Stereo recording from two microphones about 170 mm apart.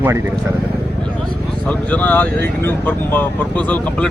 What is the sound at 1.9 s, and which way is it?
Speech, 10° left (ahead or behind).